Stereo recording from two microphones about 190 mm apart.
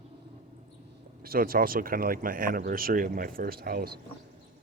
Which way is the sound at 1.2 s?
50° right (ahead or behind).